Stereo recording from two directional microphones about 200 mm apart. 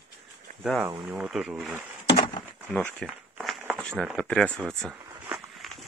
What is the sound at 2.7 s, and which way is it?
Crumpling, 5° left (ahead or behind).